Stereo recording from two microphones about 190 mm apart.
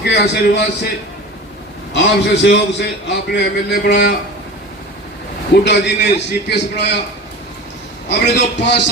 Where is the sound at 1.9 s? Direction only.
65° left (ahead or behind).